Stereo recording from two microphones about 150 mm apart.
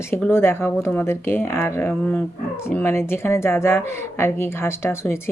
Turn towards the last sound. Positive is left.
turn(degrees=15)  # may be behind; listen again after turning